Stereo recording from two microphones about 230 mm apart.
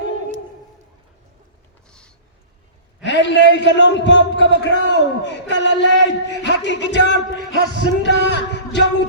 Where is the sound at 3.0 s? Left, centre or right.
Left.